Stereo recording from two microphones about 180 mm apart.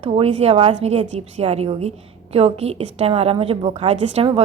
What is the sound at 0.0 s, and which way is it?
A woman's voice, 35° right (ahead or behind).